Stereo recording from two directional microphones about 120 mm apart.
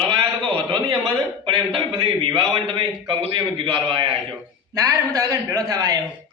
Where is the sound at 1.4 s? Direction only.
45° right (ahead or behind).